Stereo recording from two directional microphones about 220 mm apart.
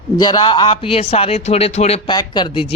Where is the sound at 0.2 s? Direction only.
20° left (ahead or behind).